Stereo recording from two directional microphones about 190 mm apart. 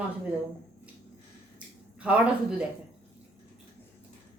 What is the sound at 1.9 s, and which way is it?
Speech, 5° right (ahead or behind).